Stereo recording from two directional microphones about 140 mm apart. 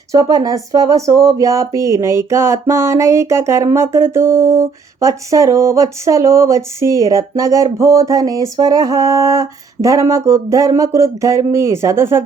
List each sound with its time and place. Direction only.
0.1 s speech: 25° right (ahead or behind)